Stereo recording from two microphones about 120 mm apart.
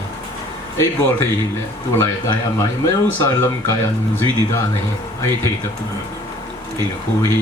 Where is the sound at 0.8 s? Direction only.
25° left (ahead or behind).